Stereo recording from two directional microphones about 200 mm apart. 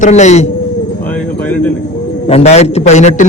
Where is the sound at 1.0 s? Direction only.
10° left (ahead or behind).